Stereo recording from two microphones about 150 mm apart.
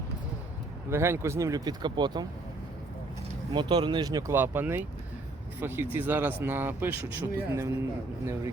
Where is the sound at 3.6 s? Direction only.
30° right (ahead or behind).